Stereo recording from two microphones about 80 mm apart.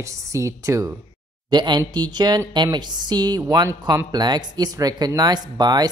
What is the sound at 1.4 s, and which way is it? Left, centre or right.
Speech, right.